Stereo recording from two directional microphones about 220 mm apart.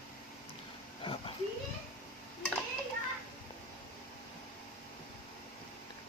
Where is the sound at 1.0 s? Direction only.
25° left (ahead or behind).